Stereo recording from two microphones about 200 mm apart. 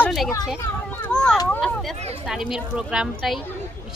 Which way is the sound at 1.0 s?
5° left (ahead or behind).